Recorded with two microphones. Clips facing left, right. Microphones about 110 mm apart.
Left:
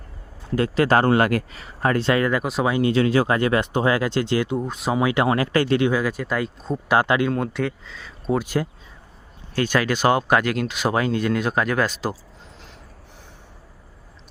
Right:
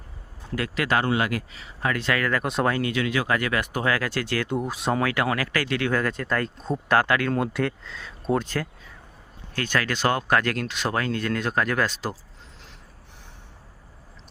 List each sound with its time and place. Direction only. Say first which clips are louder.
0.5 s speech: left 6 dB; 30° left (ahead or behind); by 1.7 s 50° left (ahead or behind)
1.8 s speech: left 5 dB; 35° left (ahead or behind)
2.4 s speech: left 1 dB; 5° left (ahead or behind)
2.8 s speech: left 7 dB; 35° left (ahead or behind)
4.4 s speech: left 1 dB; 5° right (ahead or behind)
4.9 s speech: left 7 dB; 20° left (ahead or behind)
5.9 s speech: left 2 dB; 10° left (ahead or behind)
6.9 s speech: left 3 dB; 20° left (ahead or behind)
7.3 s speech: left 1 dB; centre (ahead or behind)
9.6 s speech: left 5 dB; 15° left (ahead or behind)